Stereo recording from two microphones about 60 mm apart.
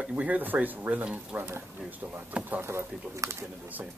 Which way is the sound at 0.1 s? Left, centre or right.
Right.